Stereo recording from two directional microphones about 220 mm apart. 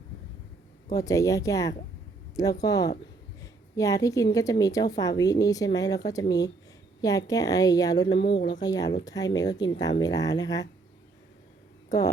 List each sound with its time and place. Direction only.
0.9 s a woman's voice: 15° left (ahead or behind)
11.9 s speech: 15° left (ahead or behind)